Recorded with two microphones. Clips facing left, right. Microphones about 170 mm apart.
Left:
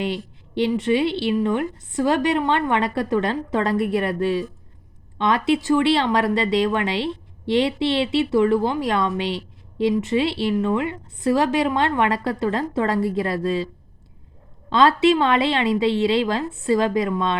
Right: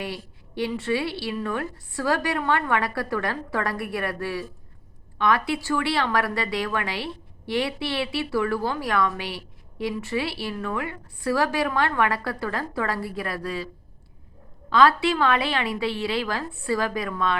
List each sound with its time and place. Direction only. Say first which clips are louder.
0.0 s a sound: left 7 dB; 25° left (ahead or behind)
0.7 s speech: left 7 dB; 20° left (ahead or behind)
14.7 s speech: left 3 dB; 25° left (ahead or behind)